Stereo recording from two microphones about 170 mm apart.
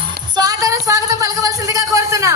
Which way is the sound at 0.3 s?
20° right (ahead or behind).